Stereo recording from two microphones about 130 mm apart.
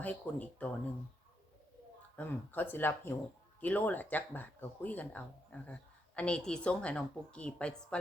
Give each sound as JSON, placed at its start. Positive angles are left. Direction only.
{"t": 0.0, "sound": "speech", "side_deg": 10}
{"t": 2.1, "sound": "speech", "side_deg": 15}